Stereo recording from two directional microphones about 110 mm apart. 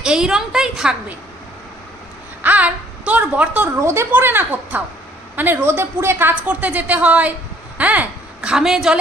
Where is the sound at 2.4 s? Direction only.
15° right (ahead or behind).